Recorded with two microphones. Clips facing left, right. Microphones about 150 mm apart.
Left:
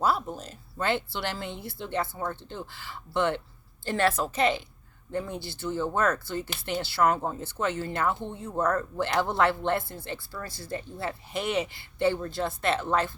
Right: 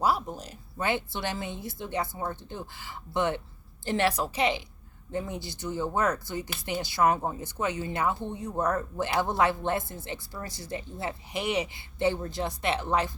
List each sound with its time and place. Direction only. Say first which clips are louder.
0.0 s speech: even; 10° right (ahead or behind)